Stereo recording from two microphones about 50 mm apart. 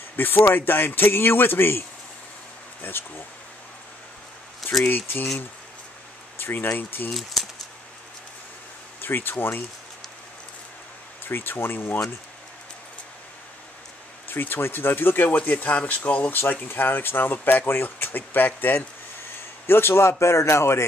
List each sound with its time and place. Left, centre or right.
0.1 s speech: left
4.8 s speech: left
6.3 s speech: left
7.1 s speech: centre
9.0 s speech: left
11.2 s speech: left
14.3 s speech: left
15.3 s speech: left
16.6 s a man's voice: left